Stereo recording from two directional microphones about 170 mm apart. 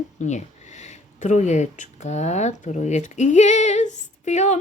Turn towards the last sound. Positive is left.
turn(degrees=45)  # may be behind; listen again after turning